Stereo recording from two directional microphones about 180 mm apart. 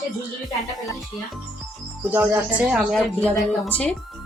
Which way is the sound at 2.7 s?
5° right (ahead or behind).